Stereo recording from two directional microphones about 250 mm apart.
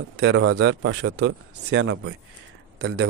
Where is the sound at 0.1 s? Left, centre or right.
Right.